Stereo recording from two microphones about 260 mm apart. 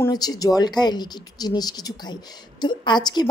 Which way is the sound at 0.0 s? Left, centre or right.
Centre.